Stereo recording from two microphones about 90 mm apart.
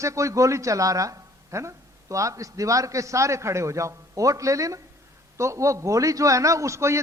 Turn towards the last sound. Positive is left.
turn(degrees=-30)  # may be behind; listen again after turning